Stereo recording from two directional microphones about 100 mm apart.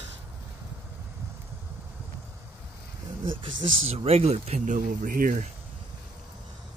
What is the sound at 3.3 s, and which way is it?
Speech, 75° right (ahead or behind).